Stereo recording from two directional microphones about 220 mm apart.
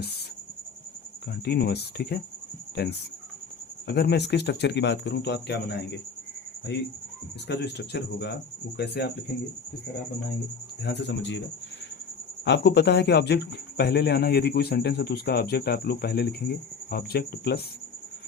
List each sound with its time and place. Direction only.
1.3 s speech: 45° left (ahead or behind)
7.4 s speech: 50° left (ahead or behind)
10.8 s speech: 55° left (ahead or behind)
12.5 s speech: 50° left (ahead or behind)